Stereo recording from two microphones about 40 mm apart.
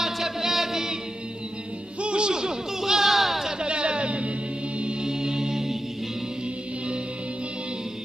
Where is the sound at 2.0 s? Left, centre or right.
Right; by 3.4 s centre.